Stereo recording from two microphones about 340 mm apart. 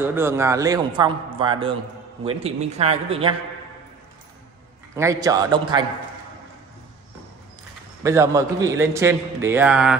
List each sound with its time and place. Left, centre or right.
0.0 s a man's voice: centre
4.9 s a man's voice: centre
8.0 s a man's voice: centre